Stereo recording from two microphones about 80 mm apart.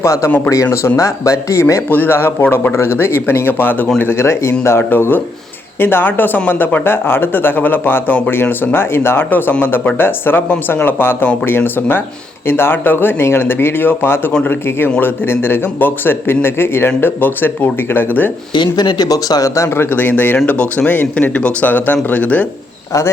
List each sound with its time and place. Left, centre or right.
0.0 s speech: left
0.3 s speech: left
0.5 s speech: left
1.9 s speech: left
18.5 s speech: left; by 22.4 s centre
22.9 s speech: left